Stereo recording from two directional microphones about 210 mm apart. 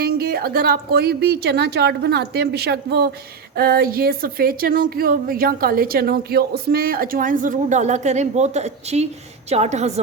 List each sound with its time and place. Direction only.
0.0 s a woman's voice: 50° right (ahead or behind); by 10.0 s 30° right (ahead or behind)